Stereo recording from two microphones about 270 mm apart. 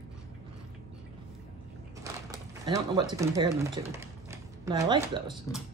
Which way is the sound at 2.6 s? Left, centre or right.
Centre.